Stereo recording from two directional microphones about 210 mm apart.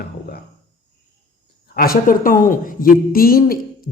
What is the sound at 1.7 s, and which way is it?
A woman's voice, 45° left (ahead or behind).